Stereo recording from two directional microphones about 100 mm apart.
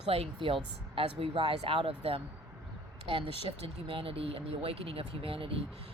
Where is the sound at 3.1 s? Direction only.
65° right (ahead or behind).